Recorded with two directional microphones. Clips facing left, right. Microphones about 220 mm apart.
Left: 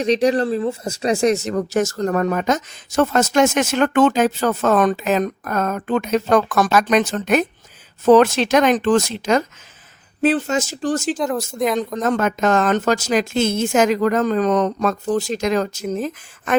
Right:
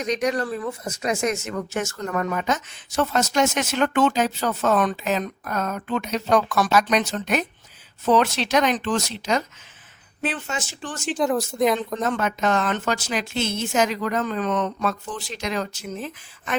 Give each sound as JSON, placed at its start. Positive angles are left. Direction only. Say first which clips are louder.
{"t": 0.0, "sound": "a woman's voice", "louder": "left 7 dB", "side_deg": 30}
{"t": 10.2, "sound": "speech", "louder": "left 11 dB", "side_deg": 35}
{"t": 11.2, "sound": "speech", "louder": "even", "side_deg": 0}
{"t": 12.0, "sound": "a woman's voice", "louder": "left 5 dB", "side_deg": 45}